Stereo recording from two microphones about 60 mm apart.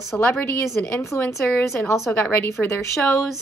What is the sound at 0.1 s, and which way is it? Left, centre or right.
Speech, left.